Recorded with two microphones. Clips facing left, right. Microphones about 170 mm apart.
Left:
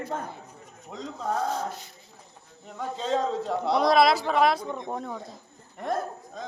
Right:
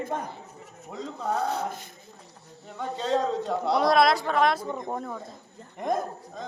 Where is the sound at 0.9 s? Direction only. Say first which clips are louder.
Even; 5° right (ahead or behind).